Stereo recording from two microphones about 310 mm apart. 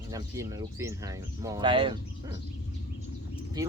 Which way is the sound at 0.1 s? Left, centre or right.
Centre.